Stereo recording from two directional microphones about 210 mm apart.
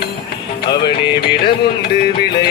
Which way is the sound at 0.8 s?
50° left (ahead or behind).